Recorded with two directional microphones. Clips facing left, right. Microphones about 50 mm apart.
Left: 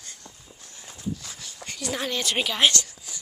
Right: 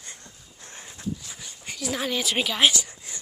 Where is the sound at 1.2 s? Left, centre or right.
Centre.